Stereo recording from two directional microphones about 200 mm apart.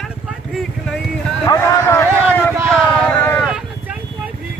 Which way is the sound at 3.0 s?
5° left (ahead or behind).